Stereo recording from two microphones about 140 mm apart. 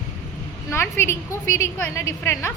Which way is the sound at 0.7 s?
15° left (ahead or behind).